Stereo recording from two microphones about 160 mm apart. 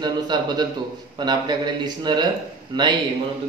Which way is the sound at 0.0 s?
25° right (ahead or behind).